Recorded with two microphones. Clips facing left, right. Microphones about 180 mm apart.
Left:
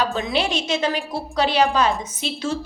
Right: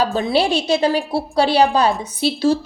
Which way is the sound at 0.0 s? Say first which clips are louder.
Right 5 dB; 35° right (ahead or behind).